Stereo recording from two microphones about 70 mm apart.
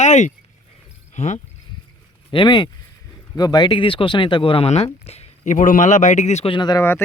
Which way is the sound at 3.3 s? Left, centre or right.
Left.